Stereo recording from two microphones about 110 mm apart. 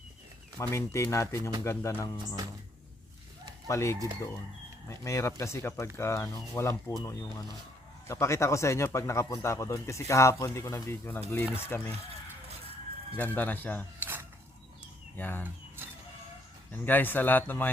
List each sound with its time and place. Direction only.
0.6 s speech: 25° left (ahead or behind)
3.7 s speech: 25° left (ahead or behind)
13.1 s speech: 15° left (ahead or behind)
15.1 s speech: 15° left (ahead or behind)
16.7 s speech: 15° left (ahead or behind)